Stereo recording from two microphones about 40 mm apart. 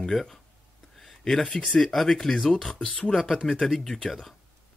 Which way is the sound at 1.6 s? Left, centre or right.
Centre.